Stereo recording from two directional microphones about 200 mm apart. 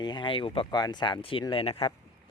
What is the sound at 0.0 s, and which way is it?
Speech, 20° left (ahead or behind).